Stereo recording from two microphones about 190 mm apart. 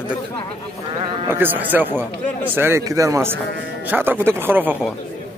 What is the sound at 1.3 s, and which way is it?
Speech, 10° right (ahead or behind).